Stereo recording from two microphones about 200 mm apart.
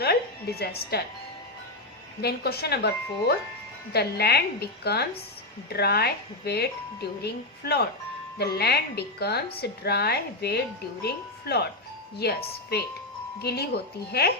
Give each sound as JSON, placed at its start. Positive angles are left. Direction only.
{"t": 0.0, "sound": "a sound", "side_deg": 50}
{"t": 2.2, "sound": "speech", "side_deg": 55}
{"t": 12.7, "sound": "speech", "side_deg": 55}